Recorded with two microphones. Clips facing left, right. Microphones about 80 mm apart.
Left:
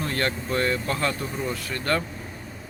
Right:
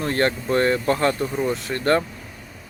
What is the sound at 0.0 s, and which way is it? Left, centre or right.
Speech, right.